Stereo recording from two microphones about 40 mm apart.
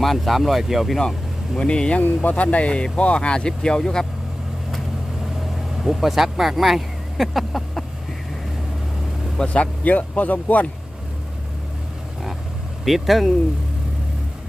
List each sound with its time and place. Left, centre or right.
0.0 s speech: centre
1.5 s speech: left
5.2 s vehicle: centre
9.4 s speech: left
12.8 s speech: centre